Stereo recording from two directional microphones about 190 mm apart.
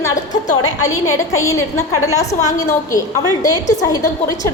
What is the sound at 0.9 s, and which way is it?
Speech, 90° left.